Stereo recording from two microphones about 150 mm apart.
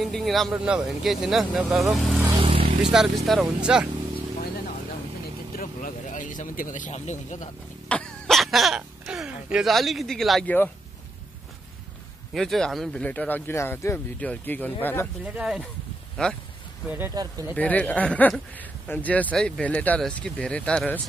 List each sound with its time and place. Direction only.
0.0 s speech: centre (ahead or behind)
2.3 s vehicle: 35° right (ahead or behind)
2.9 s speech: 5° right (ahead or behind)
5.6 s a sound: 60° left (ahead or behind)
7.9 s throat clearing: 5° left (ahead or behind)
12.4 s speech: 5° left (ahead or behind)
15.2 s speech: 5° right (ahead or behind)
16.2 s speech: 5° left (ahead or behind)
16.8 s speech: 10° right (ahead or behind)
17.1 s speech: 25° right (ahead or behind)
17.6 s speech: 10° left (ahead or behind)